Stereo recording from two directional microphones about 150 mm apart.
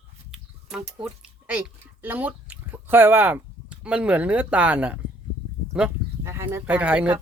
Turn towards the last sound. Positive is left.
turn(degrees=-10)  # may be behind; listen again after turning